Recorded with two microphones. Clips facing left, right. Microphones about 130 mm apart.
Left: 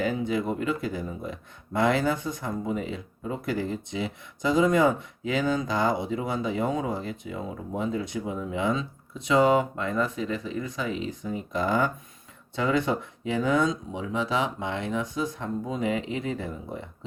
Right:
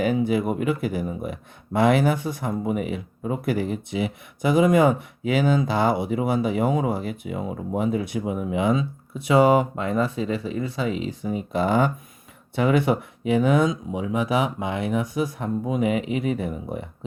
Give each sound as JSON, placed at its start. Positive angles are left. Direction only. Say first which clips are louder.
{"t": 0.0, "sound": "speech", "louder": "right 5 dB", "side_deg": -20}